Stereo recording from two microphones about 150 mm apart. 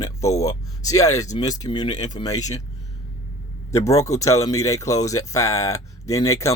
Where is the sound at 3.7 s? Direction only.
20° left (ahead or behind).